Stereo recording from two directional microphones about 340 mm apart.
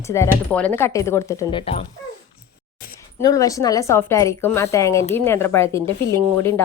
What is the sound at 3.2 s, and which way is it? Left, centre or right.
A woman's voice, centre.